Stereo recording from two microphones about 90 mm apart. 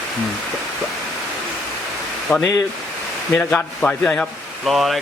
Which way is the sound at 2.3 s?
20° left (ahead or behind).